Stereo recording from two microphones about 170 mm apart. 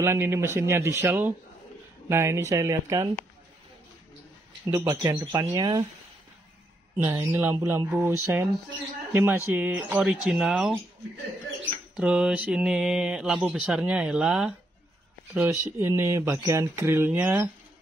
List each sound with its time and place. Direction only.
0.0 s speech: 15° right (ahead or behind)
4.6 s speech: 20° right (ahead or behind)
7.0 s speech: 15° right (ahead or behind)
11.9 s speech: 5° right (ahead or behind)
15.6 s speech: 15° right (ahead or behind)